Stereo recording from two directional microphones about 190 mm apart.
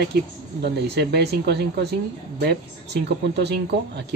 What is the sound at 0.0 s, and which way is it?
Speech, 60° right (ahead or behind).